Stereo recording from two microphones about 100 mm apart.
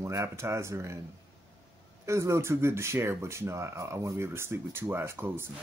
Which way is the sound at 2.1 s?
30° right (ahead or behind).